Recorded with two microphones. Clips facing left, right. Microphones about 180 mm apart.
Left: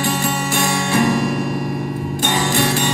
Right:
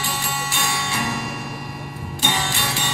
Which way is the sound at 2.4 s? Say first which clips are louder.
Left 9 dB; 45° left (ahead or behind).